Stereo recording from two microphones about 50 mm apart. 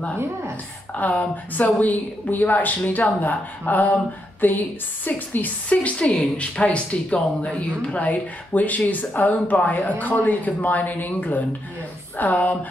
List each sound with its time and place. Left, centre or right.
0.9 s speech: left
5.8 s speech: left